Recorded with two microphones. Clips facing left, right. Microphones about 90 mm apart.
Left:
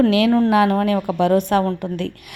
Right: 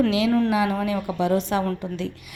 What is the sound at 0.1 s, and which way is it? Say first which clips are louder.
A woman's voice: left 5 dB; 55° left (ahead or behind).